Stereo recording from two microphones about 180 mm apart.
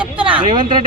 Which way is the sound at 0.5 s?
25° right (ahead or behind).